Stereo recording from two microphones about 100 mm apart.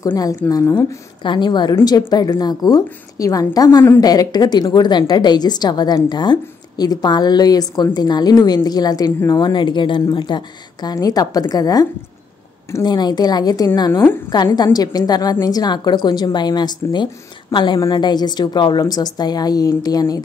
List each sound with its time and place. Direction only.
0.1 s a woman's voice: 35° left (ahead or behind)
1.2 s a woman's voice: 50° left (ahead or behind)
13.9 s a woman's voice: 20° left (ahead or behind)
14.3 s a woman's voice: 45° left (ahead or behind)